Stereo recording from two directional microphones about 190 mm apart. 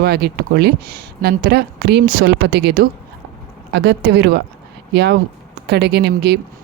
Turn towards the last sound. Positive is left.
turn(degrees=-60)  # may be behind; listen again after turning